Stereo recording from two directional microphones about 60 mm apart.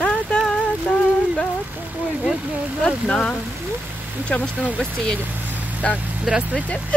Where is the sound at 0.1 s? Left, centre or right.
Centre.